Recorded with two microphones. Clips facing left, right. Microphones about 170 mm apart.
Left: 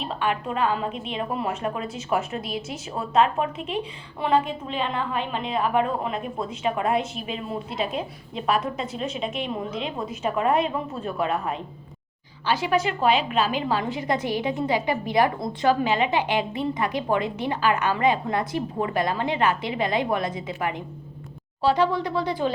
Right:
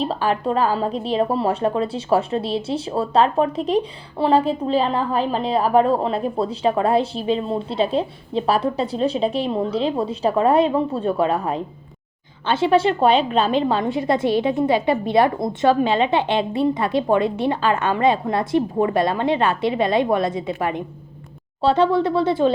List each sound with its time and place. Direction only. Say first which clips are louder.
0.0 s a woman's voice: right 6 dB; 35° right (ahead or behind)
13.9 s a woman's voice: right 6 dB; 20° left (ahead or behind)
14.4 s a woman's voice: right 6 dB; 25° right (ahead or behind)